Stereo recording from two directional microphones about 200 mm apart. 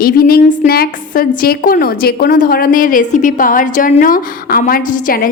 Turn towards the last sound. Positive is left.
turn(degrees=45)  # may be behind; listen again after turning